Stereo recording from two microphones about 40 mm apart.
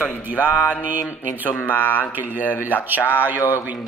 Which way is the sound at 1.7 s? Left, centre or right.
Left.